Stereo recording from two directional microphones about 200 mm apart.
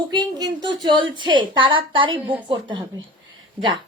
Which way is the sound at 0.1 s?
20° right (ahead or behind).